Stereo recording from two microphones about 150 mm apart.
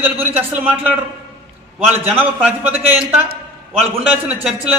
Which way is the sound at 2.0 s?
10° right (ahead or behind).